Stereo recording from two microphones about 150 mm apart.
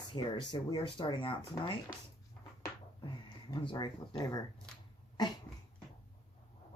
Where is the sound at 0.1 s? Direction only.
30° left (ahead or behind).